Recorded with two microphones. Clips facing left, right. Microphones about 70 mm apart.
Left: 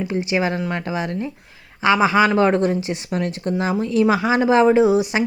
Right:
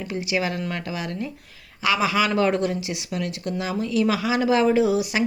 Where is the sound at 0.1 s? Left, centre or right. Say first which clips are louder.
Left 2 dB; left.